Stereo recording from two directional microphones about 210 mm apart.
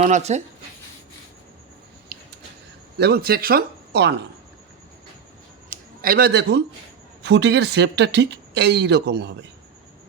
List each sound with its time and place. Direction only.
0.0 s speech: 30° right (ahead or behind)
3.0 s speech: 50° right (ahead or behind)
5.7 s speech: 45° right (ahead or behind)